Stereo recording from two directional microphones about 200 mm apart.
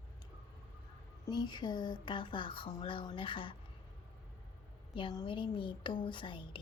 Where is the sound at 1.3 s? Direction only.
20° left (ahead or behind).